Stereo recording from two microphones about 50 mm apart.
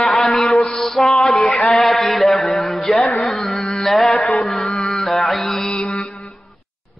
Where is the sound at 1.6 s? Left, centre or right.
Centre.